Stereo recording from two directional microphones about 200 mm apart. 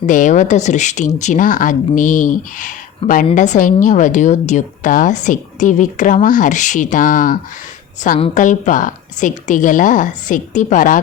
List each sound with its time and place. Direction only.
0.0 s a woman's voice: 40° left (ahead or behind)